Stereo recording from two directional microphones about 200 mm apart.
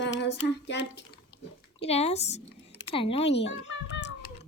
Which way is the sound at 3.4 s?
60° left (ahead or behind).